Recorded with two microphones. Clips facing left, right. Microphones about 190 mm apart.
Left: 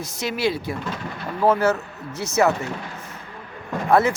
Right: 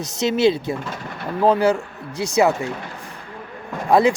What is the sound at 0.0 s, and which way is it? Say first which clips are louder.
Speech: right 7 dB; 20° right (ahead or behind).